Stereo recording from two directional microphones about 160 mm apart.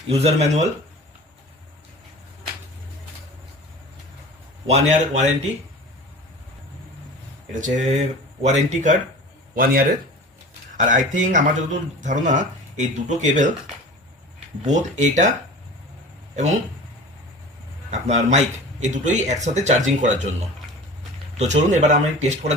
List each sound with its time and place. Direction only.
0.1 s speech: 40° right (ahead or behind)
4.7 s speech: 45° right (ahead or behind)
7.6 s speech: 45° right (ahead or behind)
9.6 s speech: 65° right (ahead or behind)
10.8 s speech: 50° right (ahead or behind)
14.7 s speech: 50° right (ahead or behind)
18.1 s speech: 45° right (ahead or behind)
21.3 s speech: 45° right (ahead or behind)